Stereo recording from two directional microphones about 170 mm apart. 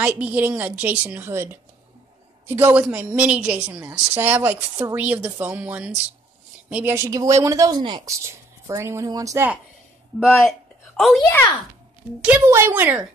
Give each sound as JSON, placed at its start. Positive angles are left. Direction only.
{"t": 0.0, "sound": "a woman's voice", "side_deg": -10}
{"t": 11.1, "sound": "a child's voice", "side_deg": 20}
{"t": 12.2, "sound": "a woman's voice", "side_deg": -10}